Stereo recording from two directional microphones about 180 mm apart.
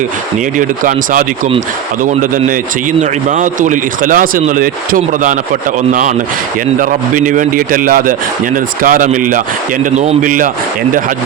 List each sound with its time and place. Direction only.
3.0 s speech: 45° right (ahead or behind)